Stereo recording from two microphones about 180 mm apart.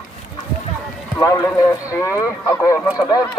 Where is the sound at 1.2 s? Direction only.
20° left (ahead or behind).